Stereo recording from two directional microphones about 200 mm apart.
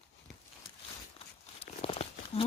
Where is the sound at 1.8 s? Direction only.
25° left (ahead or behind).